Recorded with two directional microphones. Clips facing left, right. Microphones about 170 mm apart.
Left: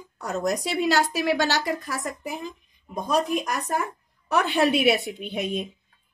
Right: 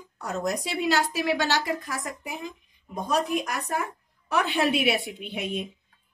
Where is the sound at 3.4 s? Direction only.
40° left (ahead or behind).